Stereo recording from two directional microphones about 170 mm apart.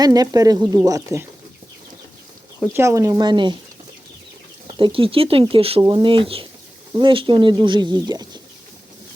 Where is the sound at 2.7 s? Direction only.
15° right (ahead or behind).